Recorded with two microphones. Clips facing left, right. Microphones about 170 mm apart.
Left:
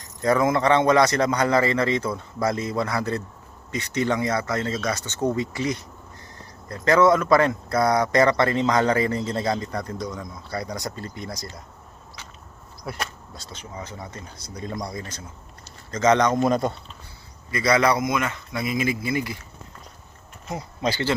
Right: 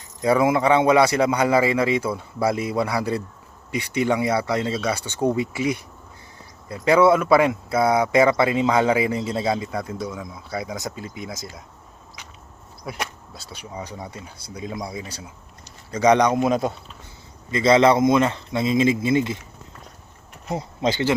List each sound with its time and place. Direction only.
0.2 s speech: 10° right (ahead or behind)
12.9 s speech: centre (ahead or behind)
17.5 s speech: 25° right (ahead or behind)
20.5 s speech: 25° right (ahead or behind)